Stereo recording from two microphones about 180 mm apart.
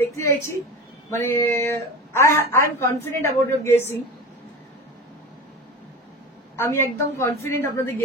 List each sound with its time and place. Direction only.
0.0 s a sound: 15° left (ahead or behind)
1.1 s a woman's voice: 15° left (ahead or behind)
6.5 s a woman's voice: 15° left (ahead or behind)